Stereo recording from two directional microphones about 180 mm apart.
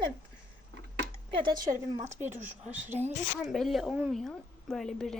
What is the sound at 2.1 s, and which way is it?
Speech, 10° right (ahead or behind).